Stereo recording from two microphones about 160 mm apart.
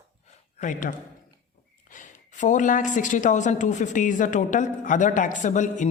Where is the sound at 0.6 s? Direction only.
55° left (ahead or behind).